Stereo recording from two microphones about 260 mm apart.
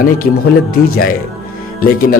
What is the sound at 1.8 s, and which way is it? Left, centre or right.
Speech, left.